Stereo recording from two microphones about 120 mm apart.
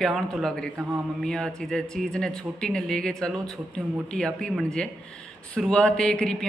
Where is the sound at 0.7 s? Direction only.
20° right (ahead or behind).